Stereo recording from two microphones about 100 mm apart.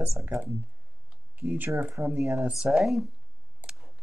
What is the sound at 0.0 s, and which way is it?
Speech, 20° right (ahead or behind).